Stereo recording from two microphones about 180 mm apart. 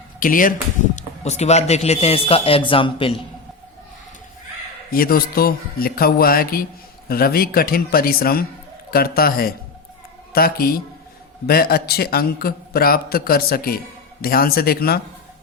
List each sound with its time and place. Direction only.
0.2 s speech: 50° left (ahead or behind)
0.9 s speech: 40° left (ahead or behind)
4.9 s a man's voice: 55° left (ahead or behind)